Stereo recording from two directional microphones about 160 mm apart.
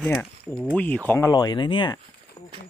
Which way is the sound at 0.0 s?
10° left (ahead or behind).